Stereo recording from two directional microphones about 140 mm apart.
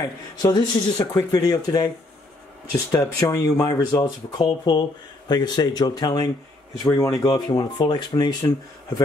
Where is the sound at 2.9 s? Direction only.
25° left (ahead or behind).